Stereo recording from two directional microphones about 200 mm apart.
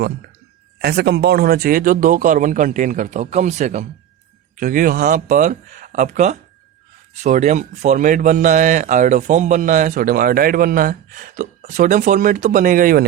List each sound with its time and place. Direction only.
0.8 s speech: 55° right (ahead or behind)